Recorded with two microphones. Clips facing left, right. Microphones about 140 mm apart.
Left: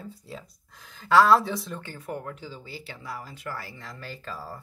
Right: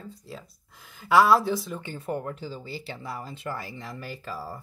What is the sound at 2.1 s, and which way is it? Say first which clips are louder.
Speech: right 4 dB; 35° right (ahead or behind).